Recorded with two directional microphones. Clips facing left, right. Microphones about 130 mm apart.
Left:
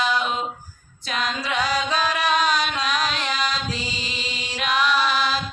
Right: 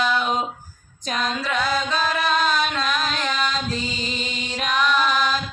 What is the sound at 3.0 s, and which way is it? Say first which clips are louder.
Music: right 1 dB; 40° right (ahead or behind).